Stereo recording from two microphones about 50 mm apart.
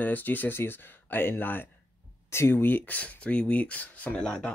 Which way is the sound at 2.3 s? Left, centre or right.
Left.